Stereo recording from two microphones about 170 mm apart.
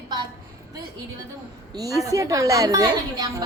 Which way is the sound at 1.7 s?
20° right (ahead or behind).